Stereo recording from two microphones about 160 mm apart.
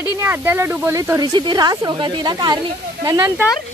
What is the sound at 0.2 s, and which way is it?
Speech, 15° right (ahead or behind).